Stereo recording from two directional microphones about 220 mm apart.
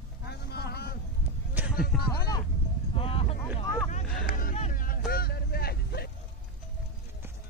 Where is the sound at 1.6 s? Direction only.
10° right (ahead or behind).